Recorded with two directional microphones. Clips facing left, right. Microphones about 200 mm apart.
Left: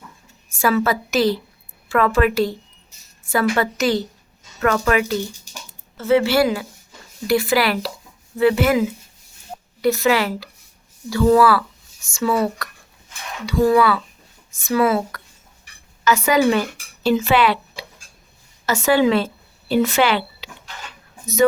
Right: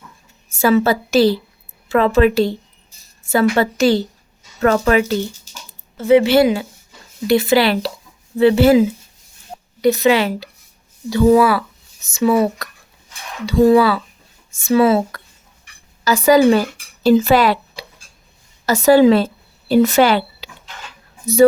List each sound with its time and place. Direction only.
0.5 s a woman's voice: 25° right (ahead or behind)
6.0 s a woman's voice: 15° right (ahead or behind)
9.5 s a sound: 5° right (ahead or behind)
9.8 s a woman's voice: 20° right (ahead or behind); by 20.5 s 40° right (ahead or behind)